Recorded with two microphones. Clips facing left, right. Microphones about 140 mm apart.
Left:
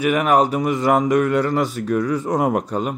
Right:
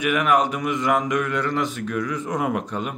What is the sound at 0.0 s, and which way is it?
Speech, 35° left (ahead or behind).